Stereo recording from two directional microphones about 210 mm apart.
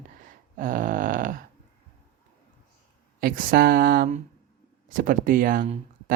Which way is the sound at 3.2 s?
45° right (ahead or behind).